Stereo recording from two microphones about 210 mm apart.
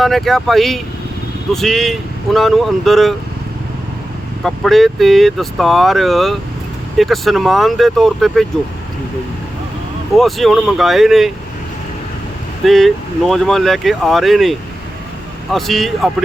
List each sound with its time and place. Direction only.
0.0 s speech: centre (ahead or behind)
4.4 s speech: centre (ahead or behind)
10.2 s speech: centre (ahead or behind)
12.6 s speech: centre (ahead or behind)
15.5 s speech: centre (ahead or behind)